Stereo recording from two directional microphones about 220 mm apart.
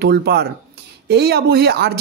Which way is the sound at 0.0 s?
45° right (ahead or behind).